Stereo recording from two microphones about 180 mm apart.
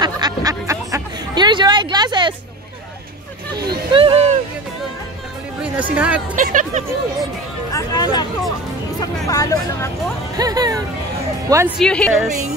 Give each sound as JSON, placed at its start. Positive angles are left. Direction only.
{"t": 0.0, "sound": "a sound", "side_deg": -20}
{"t": 3.5, "sound": "music", "side_deg": -60}
{"t": 3.9, "sound": "music", "side_deg": -30}
{"t": 5.6, "sound": "speech", "side_deg": -5}
{"t": 6.3, "sound": "speech", "side_deg": -45}
{"t": 7.7, "sound": "hubbub", "side_deg": 20}
{"t": 9.0, "sound": "speech", "side_deg": 20}
{"t": 10.3, "sound": "a woman's voice", "side_deg": -20}
{"t": 11.8, "sound": "a woman's voice", "side_deg": 5}